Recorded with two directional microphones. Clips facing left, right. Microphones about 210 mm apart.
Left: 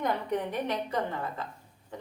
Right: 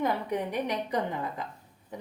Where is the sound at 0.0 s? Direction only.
10° right (ahead or behind).